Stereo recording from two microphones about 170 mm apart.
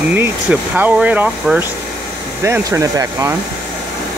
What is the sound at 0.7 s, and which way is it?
Speech, 10° right (ahead or behind).